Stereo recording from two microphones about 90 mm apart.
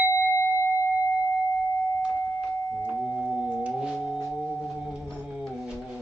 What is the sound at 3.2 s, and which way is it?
Organ, 10° right (ahead or behind).